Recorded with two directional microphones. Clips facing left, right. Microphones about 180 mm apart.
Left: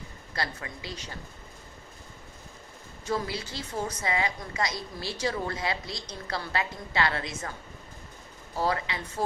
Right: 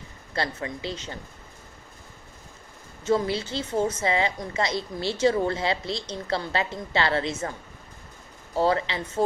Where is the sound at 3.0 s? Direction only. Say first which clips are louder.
Right 7 dB; 25° right (ahead or behind).